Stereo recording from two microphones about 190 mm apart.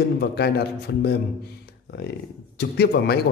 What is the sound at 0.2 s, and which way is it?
Speech, 60° left (ahead or behind).